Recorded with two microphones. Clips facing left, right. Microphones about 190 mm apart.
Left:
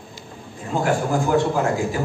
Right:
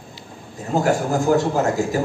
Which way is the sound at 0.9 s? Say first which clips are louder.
Right 2 dB; 40° right (ahead or behind).